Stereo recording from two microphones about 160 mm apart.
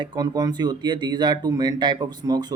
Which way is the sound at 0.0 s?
25° right (ahead or behind).